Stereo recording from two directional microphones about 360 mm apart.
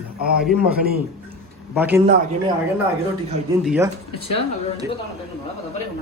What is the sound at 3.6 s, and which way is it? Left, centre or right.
Speech, centre.